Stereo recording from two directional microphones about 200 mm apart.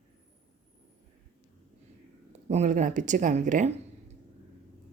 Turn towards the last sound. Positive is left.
turn(degrees=-40)  # may be behind; listen again after turning